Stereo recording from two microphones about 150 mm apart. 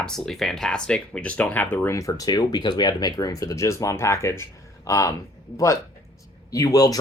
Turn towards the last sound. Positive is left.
turn(degrees=25)  # may be behind; listen again after turning